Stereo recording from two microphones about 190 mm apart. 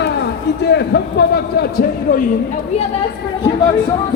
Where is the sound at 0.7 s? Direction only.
60° left (ahead or behind).